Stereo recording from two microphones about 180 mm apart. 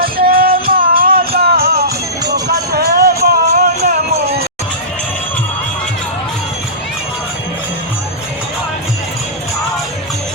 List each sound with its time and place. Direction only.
0.0 s music: 55° right (ahead or behind)
4.1 s music: 35° right (ahead or behind)